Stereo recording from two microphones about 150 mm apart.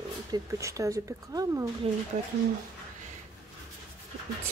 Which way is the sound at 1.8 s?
40° right (ahead or behind).